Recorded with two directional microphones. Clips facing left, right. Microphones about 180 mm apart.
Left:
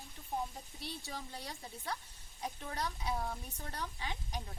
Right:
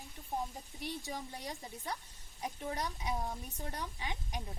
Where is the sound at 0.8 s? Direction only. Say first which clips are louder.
Right 4 dB; 15° right (ahead or behind).